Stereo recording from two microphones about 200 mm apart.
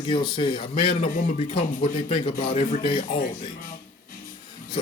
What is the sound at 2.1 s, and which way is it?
Speech, 25° left (ahead or behind).